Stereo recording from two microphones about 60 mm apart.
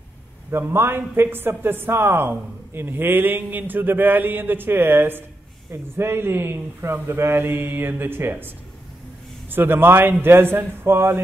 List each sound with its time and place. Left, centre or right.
0.5 s a man's voice: right